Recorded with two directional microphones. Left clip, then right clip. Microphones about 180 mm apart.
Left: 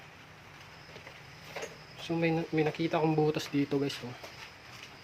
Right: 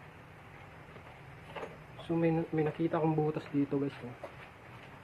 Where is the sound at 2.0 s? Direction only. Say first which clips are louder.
Left 1 dB; 40° left (ahead or behind).